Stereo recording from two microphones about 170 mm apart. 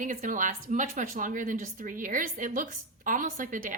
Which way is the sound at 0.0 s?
50° right (ahead or behind).